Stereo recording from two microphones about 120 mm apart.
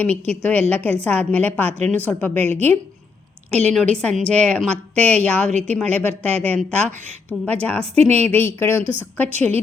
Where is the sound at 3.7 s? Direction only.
10° left (ahead or behind).